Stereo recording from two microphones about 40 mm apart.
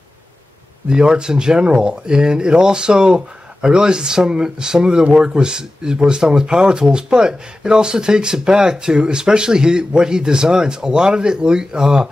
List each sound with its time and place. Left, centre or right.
0.8 s speech: right